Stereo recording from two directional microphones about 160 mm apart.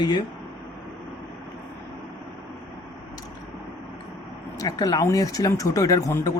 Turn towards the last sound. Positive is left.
turn(degrees=20)  # may be behind; listen again after turning